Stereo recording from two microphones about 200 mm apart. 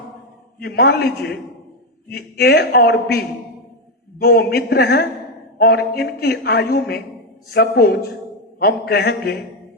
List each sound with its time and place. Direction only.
0.6 s speech: 50° left (ahead or behind)